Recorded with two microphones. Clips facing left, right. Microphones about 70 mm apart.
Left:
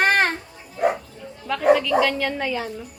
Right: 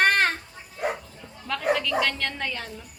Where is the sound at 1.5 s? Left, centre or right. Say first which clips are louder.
Left 7 dB; centre.